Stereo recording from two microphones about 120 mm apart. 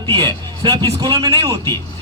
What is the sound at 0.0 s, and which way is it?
A man's voice, 45° right (ahead or behind).